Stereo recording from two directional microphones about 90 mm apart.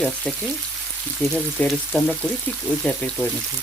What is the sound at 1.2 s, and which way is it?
Frying, 20° left (ahead or behind).